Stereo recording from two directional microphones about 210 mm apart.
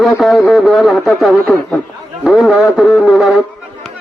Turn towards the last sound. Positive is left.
turn(degrees=-5)  # may be behind; listen again after turning